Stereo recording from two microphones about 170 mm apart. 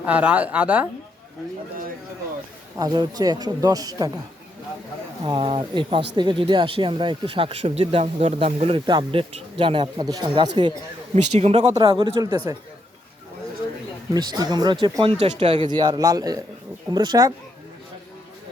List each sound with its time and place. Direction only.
0.0 s a woman's voice: 10° right (ahead or behind)
2.7 s speech: 25° right (ahead or behind)
5.2 s speech: 30° right (ahead or behind)
11.1 s speech: 40° right (ahead or behind)
11.8 s speech: 30° right (ahead or behind)
14.1 s speech: 25° right (ahead or behind)
15.2 s speech: 40° right (ahead or behind)
15.6 s speech: 25° right (ahead or behind)